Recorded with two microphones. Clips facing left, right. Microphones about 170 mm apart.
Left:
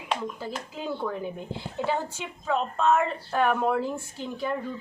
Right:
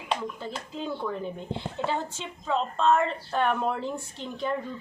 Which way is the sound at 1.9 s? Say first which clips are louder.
Left 2 dB; 10° left (ahead or behind).